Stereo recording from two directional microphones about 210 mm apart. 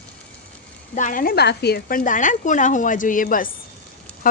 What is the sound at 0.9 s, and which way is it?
Speech, 40° left (ahead or behind).